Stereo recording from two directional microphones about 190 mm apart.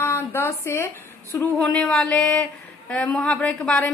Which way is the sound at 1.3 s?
10° left (ahead or behind).